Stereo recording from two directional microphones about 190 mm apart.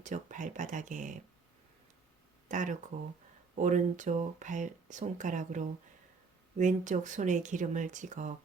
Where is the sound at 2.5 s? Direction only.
40° right (ahead or behind).